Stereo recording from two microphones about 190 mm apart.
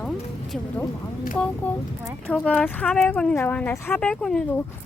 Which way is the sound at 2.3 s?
5° left (ahead or behind).